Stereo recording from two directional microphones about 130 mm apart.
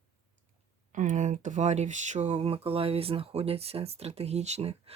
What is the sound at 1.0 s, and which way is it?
Speech, 70° right (ahead or behind).